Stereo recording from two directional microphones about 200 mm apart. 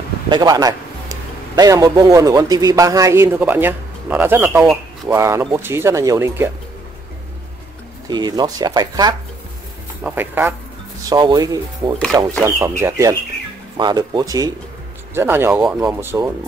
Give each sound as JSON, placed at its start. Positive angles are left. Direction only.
{"t": 0.3, "sound": "a man's voice", "side_deg": -20}
{"t": 8.1, "sound": "speech", "side_deg": -20}
{"t": 10.0, "sound": "a man's voice", "side_deg": -10}
{"t": 11.1, "sound": "a man's voice", "side_deg": -20}